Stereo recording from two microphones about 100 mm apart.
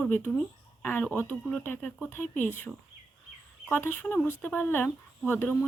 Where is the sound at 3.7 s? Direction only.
20° left (ahead or behind).